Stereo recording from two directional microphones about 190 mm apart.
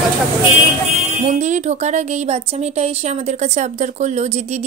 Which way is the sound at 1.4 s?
40° right (ahead or behind).